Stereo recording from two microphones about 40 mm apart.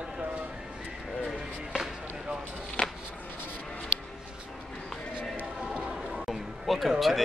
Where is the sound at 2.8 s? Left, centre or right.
Left.